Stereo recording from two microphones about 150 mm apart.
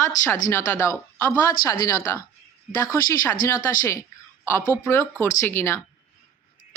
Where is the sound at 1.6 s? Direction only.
75° left (ahead or behind).